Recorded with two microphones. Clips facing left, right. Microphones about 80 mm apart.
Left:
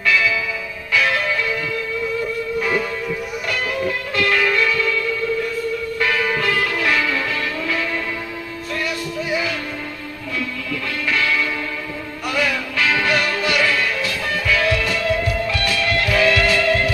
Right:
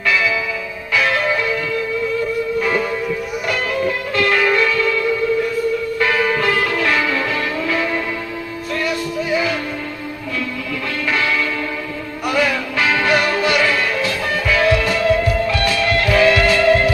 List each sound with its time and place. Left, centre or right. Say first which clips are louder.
0.0 s church bell: right 1 dB; right
0.9 s change ringing: right 2 dB; right
3.5 s music: right 2 dB; right
11.1 s music: right 1 dB; right